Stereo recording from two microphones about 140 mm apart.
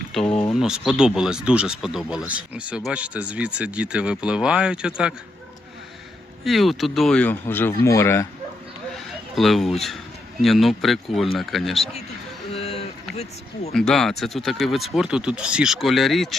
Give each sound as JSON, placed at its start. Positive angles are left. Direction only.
{"t": 0.1, "sound": "speech", "side_deg": 5}
{"t": 6.4, "sound": "speech", "side_deg": 0}
{"t": 9.3, "sound": "speech", "side_deg": 0}
{"t": 12.5, "sound": "a sound", "side_deg": 45}
{"t": 13.7, "sound": "speech", "side_deg": 5}